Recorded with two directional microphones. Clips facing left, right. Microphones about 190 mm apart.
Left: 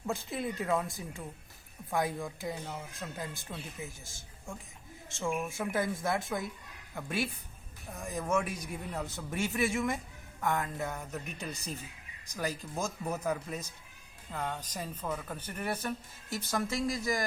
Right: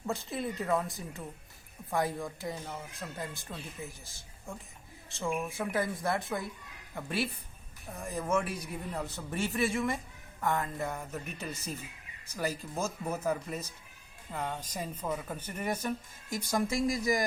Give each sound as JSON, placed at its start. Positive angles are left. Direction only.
{"t": 0.6, "sound": "speech", "side_deg": 5}